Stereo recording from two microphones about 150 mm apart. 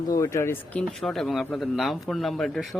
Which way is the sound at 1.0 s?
Centre (ahead or behind).